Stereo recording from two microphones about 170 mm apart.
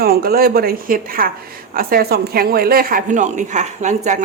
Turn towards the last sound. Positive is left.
turn(degrees=-45)  # may be behind; listen again after turning